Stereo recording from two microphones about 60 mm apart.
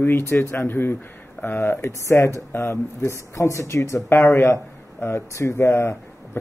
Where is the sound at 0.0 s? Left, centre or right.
Left.